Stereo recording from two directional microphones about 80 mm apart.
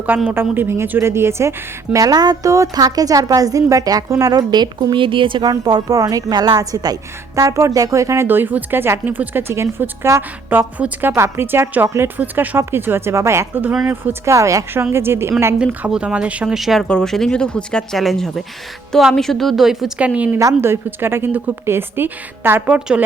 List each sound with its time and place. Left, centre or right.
0.1 s a woman's voice: right
5.5 s a woman's voice: right
15.5 s speech: centre
16.6 s a woman's voice: centre
20.0 s speech: centre
20.4 s a woman's voice: right
22.7 s speech: centre